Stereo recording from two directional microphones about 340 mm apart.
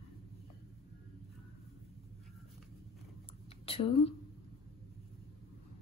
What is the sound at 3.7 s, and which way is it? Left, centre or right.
Speech, centre.